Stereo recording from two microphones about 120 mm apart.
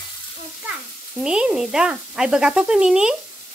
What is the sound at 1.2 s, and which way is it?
Speech, 5° right (ahead or behind).